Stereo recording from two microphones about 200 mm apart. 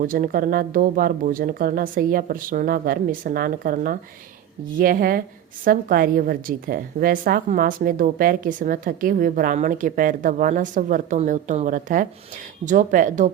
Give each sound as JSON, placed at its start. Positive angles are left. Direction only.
{"t": 0.0, "sound": "a woman's voice", "side_deg": -45}